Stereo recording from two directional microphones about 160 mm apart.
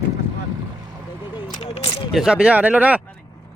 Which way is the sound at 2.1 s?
5° right (ahead or behind).